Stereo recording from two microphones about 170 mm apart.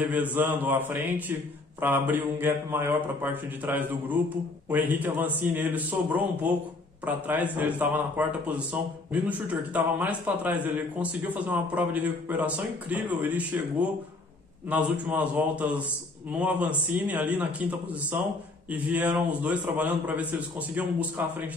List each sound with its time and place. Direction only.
0.1 s a man's voice: 10° right (ahead or behind)